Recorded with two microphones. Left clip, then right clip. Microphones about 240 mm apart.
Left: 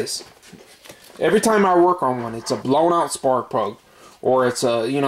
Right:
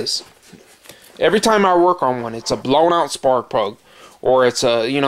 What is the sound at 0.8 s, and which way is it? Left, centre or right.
Speech, centre.